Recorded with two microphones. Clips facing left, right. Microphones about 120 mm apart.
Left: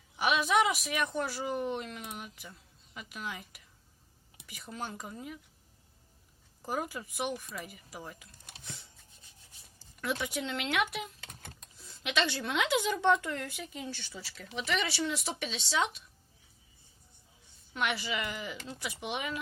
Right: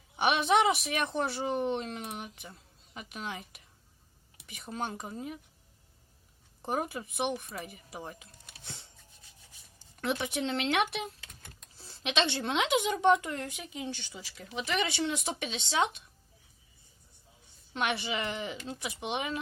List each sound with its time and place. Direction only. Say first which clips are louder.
0.2 s a woman's voice: right 2 dB; 25° right (ahead or behind)
6.6 s a woman's voice: right 2 dB; 25° right (ahead or behind)
17.7 s a woman's voice: right 1 dB; 25° right (ahead or behind)